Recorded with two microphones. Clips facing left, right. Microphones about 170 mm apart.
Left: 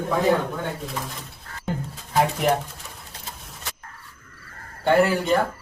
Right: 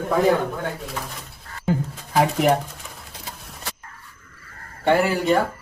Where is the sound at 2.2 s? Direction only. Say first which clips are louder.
Right 3 dB; centre (ahead or behind).